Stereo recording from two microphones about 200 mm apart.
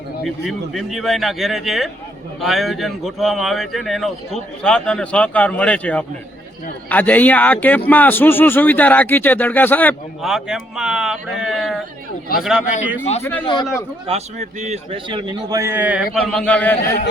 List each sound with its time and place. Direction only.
0.3 s a man's voice: centre (ahead or behind)
13.4 s a man's voice: 25° left (ahead or behind)
14.1 s a man's voice: 35° right (ahead or behind); by 16.0 s 10° right (ahead or behind)
16.1 s a man's voice: 5° left (ahead or behind)